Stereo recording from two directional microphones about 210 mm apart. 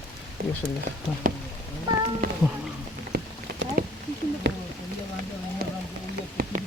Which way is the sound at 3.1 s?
50° right (ahead or behind).